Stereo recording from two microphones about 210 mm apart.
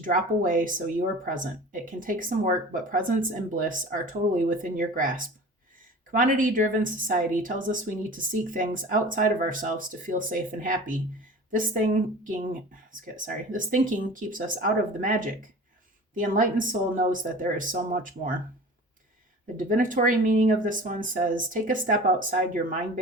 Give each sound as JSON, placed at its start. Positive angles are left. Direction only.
{"t": 0.0, "sound": "speech", "side_deg": -40}
{"t": 19.5, "sound": "speech", "side_deg": -40}